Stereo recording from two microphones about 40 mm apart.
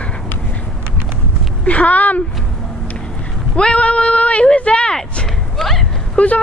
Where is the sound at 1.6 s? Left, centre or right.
Left.